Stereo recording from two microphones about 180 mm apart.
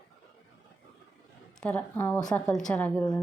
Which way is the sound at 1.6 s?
10° left (ahead or behind).